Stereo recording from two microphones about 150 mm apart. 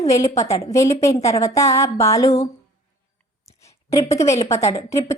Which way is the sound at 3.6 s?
20° left (ahead or behind).